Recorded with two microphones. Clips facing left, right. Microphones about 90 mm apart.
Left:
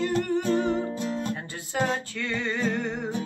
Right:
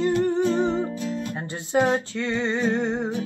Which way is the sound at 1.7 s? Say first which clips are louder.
Right 6 dB; 20° right (ahead or behind).